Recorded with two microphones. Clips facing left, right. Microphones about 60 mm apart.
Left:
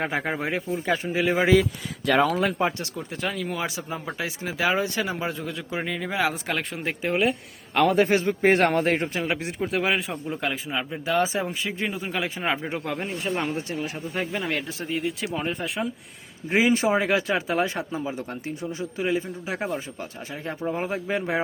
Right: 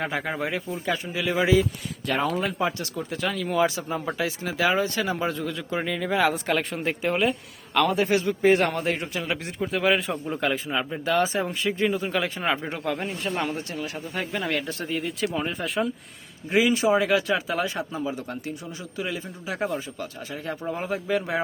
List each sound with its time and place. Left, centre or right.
0.0 s speech: left
2.0 s speech: left
2.6 s speech: left
3.2 s speech: centre
4.2 s speech: left; by 7.3 s centre
7.9 s a man's voice: left
9.1 s speech: left
9.9 s speech: centre; by 13.7 s left
14.3 s speech: centre
16.5 s speech: left